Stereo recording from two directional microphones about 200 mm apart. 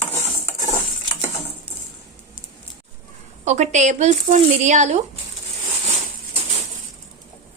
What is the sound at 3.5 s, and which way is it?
Speech, 35° right (ahead or behind).